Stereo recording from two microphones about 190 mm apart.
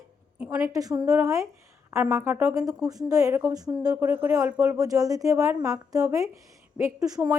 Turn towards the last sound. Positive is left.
turn(degrees=-20)  # may be behind; listen again after turning